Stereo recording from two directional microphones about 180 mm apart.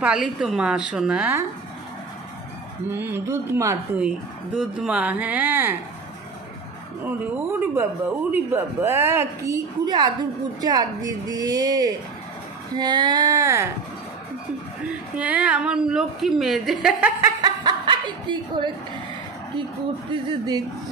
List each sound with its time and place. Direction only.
0.0 s a woman's voice: 5° right (ahead or behind)
2.9 s speech: 15° right (ahead or behind)
4.6 s speech: 5° right (ahead or behind)
7.1 s a woman's voice: 10° right (ahead or behind)
15.1 s a woman's voice: 5° right (ahead or behind)
17.2 s speech: 25° right (ahead or behind)
20.1 s a woman's voice: 25° right (ahead or behind)